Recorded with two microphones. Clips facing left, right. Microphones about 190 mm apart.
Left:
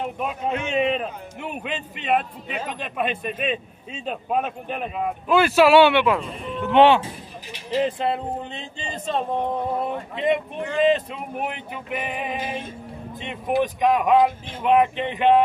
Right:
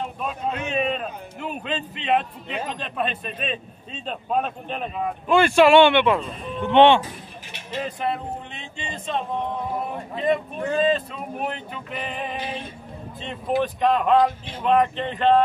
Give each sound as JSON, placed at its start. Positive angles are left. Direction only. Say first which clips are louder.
{"t": 0.0, "sound": "a man's voice", "louder": "left 1 dB", "side_deg": 15}
{"t": 7.5, "sound": "speech", "louder": "left 7 dB", "side_deg": 30}
{"t": 10.1, "sound": "a man's voice", "louder": "even", "side_deg": 20}
{"t": 12.4, "sound": "female singing", "louder": "left 2 dB", "side_deg": 50}
{"t": 13.2, "sound": "a man's voice", "louder": "left 1 dB", "side_deg": 15}